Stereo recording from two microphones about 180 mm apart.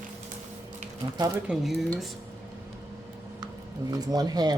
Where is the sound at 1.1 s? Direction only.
20° right (ahead or behind).